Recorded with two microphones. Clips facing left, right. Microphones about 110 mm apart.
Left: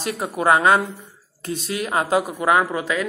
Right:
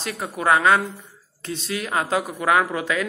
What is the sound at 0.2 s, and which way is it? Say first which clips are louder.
Mantra: left 2 dB; 25° left (ahead or behind).